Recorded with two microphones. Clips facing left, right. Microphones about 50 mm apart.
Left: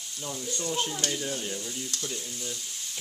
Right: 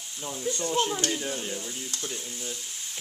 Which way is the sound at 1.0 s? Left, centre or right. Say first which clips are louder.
Right 1 dB; centre.